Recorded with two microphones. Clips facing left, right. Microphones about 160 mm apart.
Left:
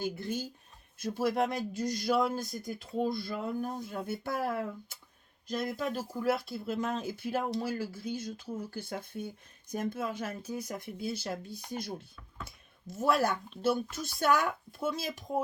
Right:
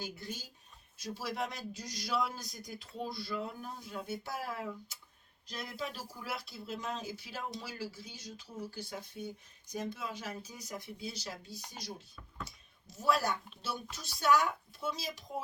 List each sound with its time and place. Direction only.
0.0 s speech: 50° left (ahead or behind)